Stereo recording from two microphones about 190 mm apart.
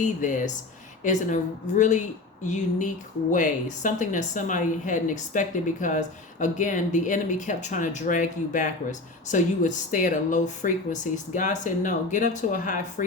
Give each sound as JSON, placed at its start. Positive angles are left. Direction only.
{"t": 0.0, "sound": "a woman's voice", "side_deg": 40}